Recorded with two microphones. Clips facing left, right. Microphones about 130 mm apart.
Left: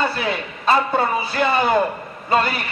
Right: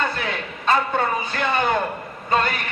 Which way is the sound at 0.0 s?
5° left (ahead or behind).